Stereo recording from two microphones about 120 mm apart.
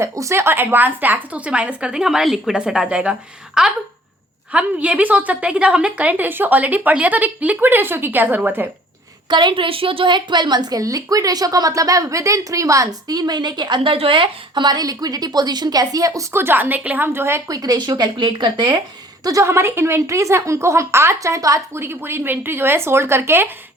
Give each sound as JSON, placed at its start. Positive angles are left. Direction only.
{"t": 0.0, "sound": "a woman's voice", "side_deg": -25}
{"t": 9.3, "sound": "a woman's voice", "side_deg": -40}
{"t": 17.6, "sound": "a woman's voice", "side_deg": -35}
{"t": 19.2, "sound": "a woman's voice", "side_deg": -25}